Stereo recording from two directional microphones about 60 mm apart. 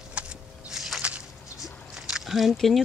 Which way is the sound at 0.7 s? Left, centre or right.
Centre.